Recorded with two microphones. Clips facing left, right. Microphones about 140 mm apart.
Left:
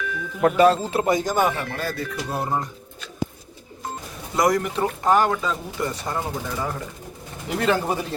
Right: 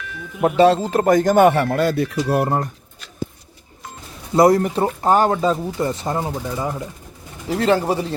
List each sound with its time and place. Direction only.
0.4 s speech: 30° right (ahead or behind); by 2.6 s 60° right (ahead or behind)
4.4 s speech: 30° right (ahead or behind)
7.6 s speech: 30° right (ahead or behind)